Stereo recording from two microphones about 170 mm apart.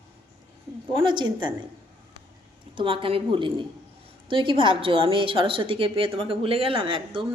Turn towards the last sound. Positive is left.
turn(degrees=-30)  # may be behind; listen again after turning